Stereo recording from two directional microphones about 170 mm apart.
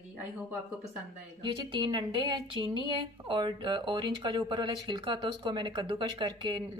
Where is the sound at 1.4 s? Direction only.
25° right (ahead or behind).